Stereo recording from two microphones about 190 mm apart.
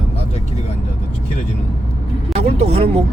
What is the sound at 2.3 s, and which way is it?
Speech, 35° right (ahead or behind).